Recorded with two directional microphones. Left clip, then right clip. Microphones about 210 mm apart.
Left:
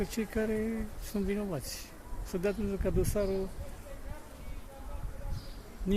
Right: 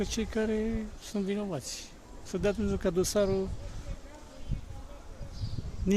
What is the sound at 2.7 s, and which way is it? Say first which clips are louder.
Speech: right 4 dB; 20° right (ahead or behind).